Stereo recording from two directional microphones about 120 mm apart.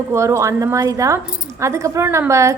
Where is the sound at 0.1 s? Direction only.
25° right (ahead or behind).